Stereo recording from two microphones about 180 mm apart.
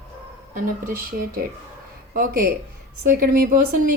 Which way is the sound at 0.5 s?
50° right (ahead or behind).